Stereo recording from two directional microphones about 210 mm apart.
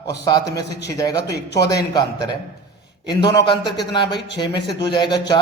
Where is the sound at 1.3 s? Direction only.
50° left (ahead or behind).